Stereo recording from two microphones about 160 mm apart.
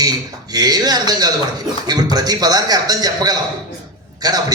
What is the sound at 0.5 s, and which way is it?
A man's voice, 25° right (ahead or behind).